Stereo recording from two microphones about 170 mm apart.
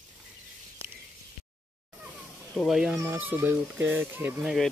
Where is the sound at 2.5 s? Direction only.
Centre (ahead or behind).